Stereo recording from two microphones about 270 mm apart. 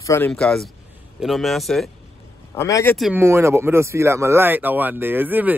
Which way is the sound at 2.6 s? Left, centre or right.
Centre.